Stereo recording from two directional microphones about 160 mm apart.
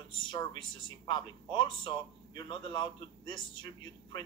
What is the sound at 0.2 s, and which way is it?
Speech, 30° left (ahead or behind).